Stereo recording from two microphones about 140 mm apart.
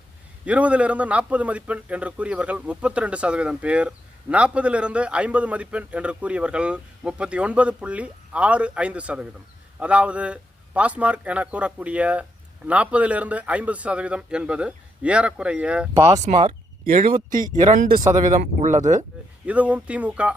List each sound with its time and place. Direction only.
0.4 s speech: 10° right (ahead or behind)
16.2 s speech: 55° right (ahead or behind)
16.8 s speech: 80° right
18.1 s speech: 65° right (ahead or behind)
19.5 s speech: 10° right (ahead or behind)